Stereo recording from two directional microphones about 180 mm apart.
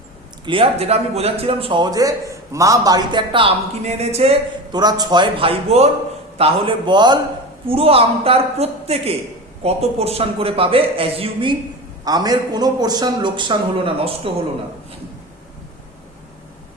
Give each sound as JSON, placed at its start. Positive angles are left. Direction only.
{"t": 0.4, "sound": "a man's voice", "side_deg": -30}
{"t": 4.7, "sound": "a man's voice", "side_deg": -20}